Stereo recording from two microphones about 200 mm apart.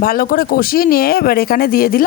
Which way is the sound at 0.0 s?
45° left (ahead or behind).